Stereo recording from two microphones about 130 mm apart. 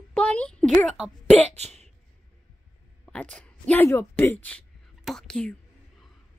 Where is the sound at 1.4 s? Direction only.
55° right (ahead or behind).